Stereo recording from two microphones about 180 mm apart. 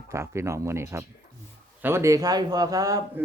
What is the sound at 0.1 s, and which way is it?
A man's voice, 15° right (ahead or behind).